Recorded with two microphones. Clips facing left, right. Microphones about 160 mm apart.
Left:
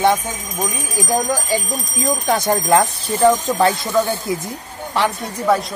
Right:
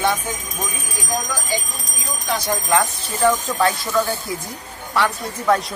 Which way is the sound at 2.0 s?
50° left (ahead or behind).